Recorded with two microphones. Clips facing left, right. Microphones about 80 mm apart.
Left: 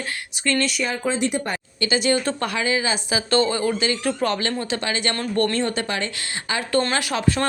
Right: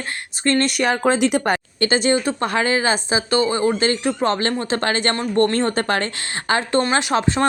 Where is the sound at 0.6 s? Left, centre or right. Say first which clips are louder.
Right 6 dB; right.